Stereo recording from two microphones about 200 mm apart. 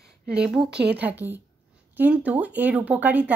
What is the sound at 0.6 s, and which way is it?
Speech, 55° right (ahead or behind).